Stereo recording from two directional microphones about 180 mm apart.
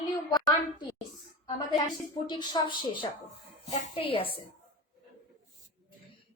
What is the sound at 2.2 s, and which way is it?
A woman's voice, 25° left (ahead or behind).